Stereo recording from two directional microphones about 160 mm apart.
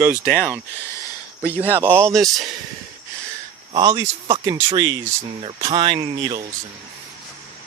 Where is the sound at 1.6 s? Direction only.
15° right (ahead or behind).